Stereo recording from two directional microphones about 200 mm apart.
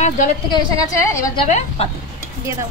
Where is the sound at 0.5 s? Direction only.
20° left (ahead or behind).